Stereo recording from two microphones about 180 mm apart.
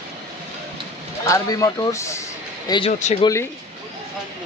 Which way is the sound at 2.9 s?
40° left (ahead or behind).